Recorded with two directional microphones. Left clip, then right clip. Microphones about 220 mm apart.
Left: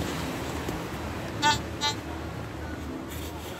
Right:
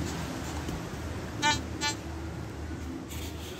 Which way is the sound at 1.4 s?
15° right (ahead or behind).